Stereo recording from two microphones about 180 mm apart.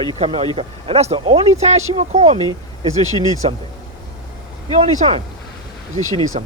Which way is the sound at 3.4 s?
30° right (ahead or behind).